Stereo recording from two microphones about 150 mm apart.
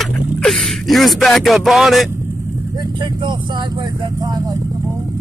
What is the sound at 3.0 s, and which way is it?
Vehicle, 30° right (ahead or behind).